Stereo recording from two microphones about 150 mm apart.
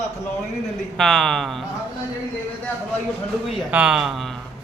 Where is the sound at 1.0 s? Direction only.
5° left (ahead or behind).